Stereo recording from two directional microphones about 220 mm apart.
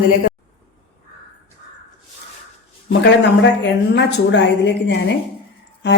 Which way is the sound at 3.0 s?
55° left (ahead or behind).